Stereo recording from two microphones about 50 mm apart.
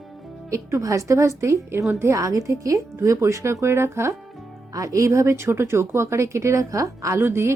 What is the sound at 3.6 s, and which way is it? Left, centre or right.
Speech, right.